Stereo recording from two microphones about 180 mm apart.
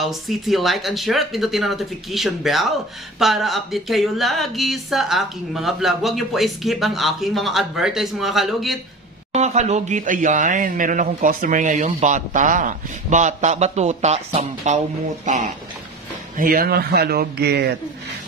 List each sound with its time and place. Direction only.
0.0 s speech: centre (ahead or behind)
9.3 s a man's voice: 40° right (ahead or behind); by 17.7 s 65° right (ahead or behind)